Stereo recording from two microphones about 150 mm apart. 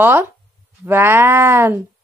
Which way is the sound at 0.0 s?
15° right (ahead or behind).